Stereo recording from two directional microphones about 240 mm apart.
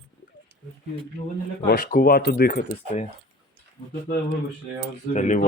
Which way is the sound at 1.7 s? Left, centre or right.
Left.